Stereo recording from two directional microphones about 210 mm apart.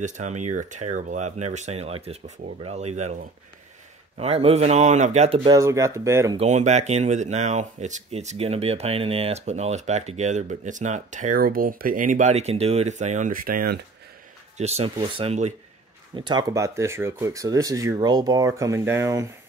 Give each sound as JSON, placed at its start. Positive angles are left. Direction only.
{"t": 0.0, "sound": "speech", "side_deg": -35}
{"t": 4.2, "sound": "speech", "side_deg": -30}
{"t": 6.3, "sound": "speech", "side_deg": -30}
{"t": 14.6, "sound": "speech", "side_deg": -30}
{"t": 16.2, "sound": "speech", "side_deg": -20}